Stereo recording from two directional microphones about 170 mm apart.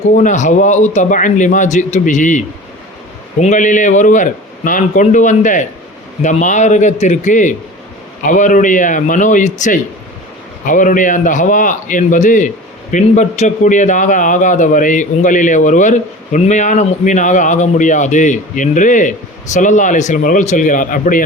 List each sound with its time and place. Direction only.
0.2 s a man's voice: 45° left (ahead or behind)